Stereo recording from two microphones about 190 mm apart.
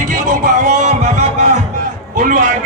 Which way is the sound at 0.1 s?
40° right (ahead or behind).